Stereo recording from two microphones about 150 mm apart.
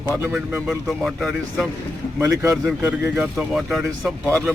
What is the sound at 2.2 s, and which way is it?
Speech, 20° right (ahead or behind).